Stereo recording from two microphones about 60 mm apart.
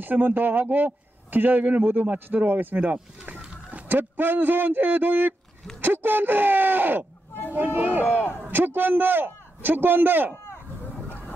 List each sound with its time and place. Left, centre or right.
0.0 s speech: right
8.0 s a man's voice: left
8.5 s speech: right
10.3 s a sound: left